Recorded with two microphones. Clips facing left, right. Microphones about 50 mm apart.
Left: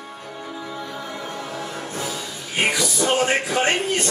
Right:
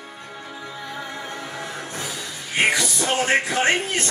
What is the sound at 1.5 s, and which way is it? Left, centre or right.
Music, centre.